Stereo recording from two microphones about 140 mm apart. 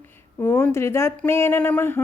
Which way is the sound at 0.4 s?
20° left (ahead or behind).